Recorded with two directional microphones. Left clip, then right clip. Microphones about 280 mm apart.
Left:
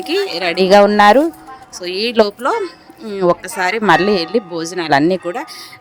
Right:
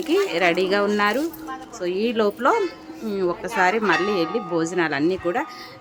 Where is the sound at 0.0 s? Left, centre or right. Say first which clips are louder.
Left 2 dB; left.